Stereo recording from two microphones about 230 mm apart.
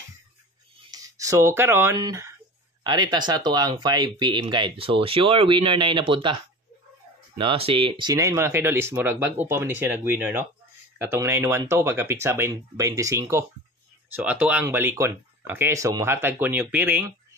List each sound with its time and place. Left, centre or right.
0.9 s speech: centre